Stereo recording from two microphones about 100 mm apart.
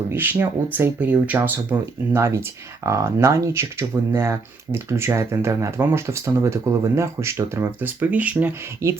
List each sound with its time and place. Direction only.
0.1 s speech: 20° right (ahead or behind)
8.8 s speech: 30° right (ahead or behind)